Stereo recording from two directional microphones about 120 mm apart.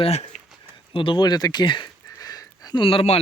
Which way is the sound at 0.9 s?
45° left (ahead or behind).